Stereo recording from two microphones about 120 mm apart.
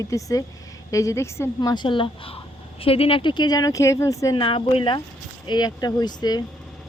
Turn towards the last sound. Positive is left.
turn(degrees=35)  # may be behind; listen again after turning